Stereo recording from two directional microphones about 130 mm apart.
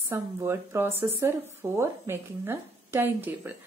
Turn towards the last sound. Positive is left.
turn(degrees=-15)  # may be behind; listen again after turning